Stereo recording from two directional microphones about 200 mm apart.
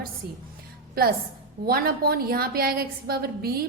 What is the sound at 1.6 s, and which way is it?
A woman's voice, 50° right (ahead or behind).